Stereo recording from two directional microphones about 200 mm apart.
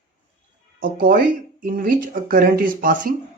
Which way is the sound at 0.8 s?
45° right (ahead or behind).